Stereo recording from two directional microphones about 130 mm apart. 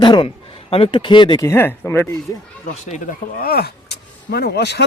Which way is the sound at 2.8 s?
65° left (ahead or behind).